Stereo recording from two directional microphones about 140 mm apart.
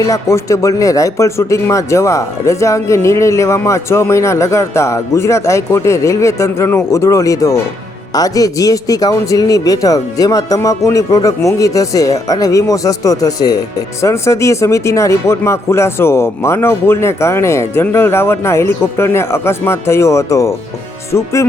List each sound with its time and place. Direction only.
0.0 s speech: 25° left (ahead or behind)